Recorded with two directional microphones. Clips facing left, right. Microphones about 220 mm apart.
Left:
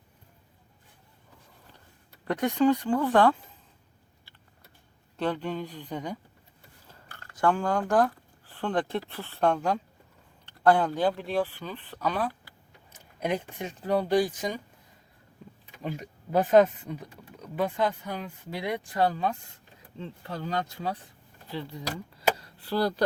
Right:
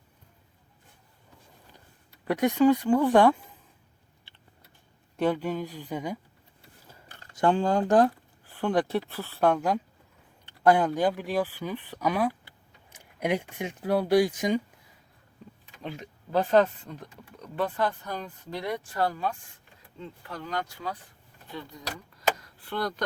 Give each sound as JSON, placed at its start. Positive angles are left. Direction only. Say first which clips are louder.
{"t": 2.2, "sound": "speech", "louder": "right 2 dB", "side_deg": -10}
{"t": 5.1, "sound": "speech", "louder": "right 3 dB", "side_deg": -10}
{"t": 8.5, "sound": "speech", "louder": "right 3 dB", "side_deg": -10}
{"t": 15.8, "sound": "speech", "louder": "left 3 dB", "side_deg": 5}